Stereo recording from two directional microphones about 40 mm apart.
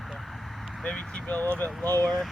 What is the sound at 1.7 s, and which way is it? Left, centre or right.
Speech, centre.